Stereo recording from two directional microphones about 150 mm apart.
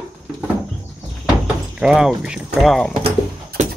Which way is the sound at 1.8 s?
5° right (ahead or behind).